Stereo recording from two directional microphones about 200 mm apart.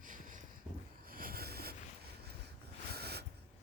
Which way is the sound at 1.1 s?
45° right (ahead or behind).